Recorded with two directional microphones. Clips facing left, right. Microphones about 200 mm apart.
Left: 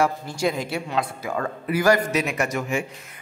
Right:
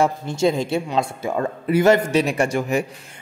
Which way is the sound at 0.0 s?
25° right (ahead or behind).